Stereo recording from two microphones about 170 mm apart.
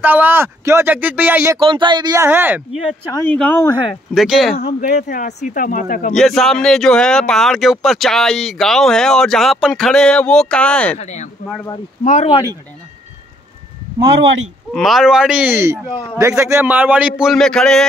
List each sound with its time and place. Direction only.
0.0 s speech: 10° right (ahead or behind)
1.6 s speech: 30° right (ahead or behind)
2.2 s speech: 10° right (ahead or behind)
3.3 s speech: 10° left (ahead or behind)
3.6 s speech: 30° left (ahead or behind)
4.1 s speech: centre (ahead or behind)
4.6 s a man's voice: 45° left (ahead or behind)
6.1 s speech: centre (ahead or behind)
11.0 s a man's voice: 45° left (ahead or behind)
13.9 s speech: 35° right (ahead or behind)
14.7 s speech: centre (ahead or behind)